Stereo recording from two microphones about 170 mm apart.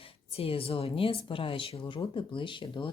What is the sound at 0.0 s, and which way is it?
Speech, 35° left (ahead or behind).